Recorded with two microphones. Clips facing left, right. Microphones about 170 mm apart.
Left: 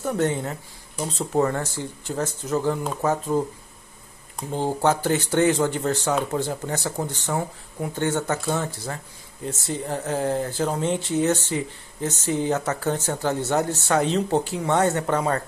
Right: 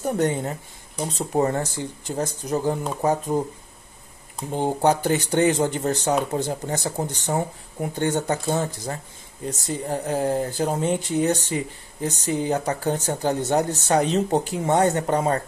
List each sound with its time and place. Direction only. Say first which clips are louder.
0.0 s speech: right 1 dB; 15° right (ahead or behind)